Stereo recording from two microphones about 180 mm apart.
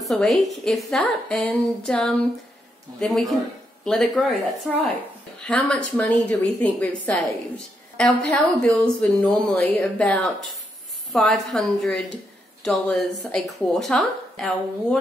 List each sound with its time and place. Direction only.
0.0 s a woman's voice: centre (ahead or behind)